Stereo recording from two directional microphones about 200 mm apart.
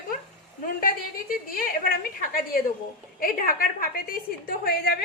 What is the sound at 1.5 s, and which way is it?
A woman's voice, 45° left (ahead or behind).